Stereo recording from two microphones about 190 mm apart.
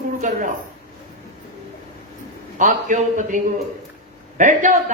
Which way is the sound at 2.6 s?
40° right (ahead or behind).